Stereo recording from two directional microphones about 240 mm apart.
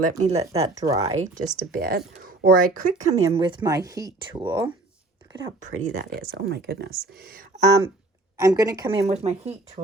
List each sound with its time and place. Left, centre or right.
0.0 s speech: right
6.0 s speech: right
8.4 s speech: centre